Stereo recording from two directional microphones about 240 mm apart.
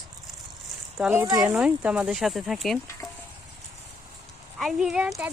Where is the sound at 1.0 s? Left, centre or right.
Centre.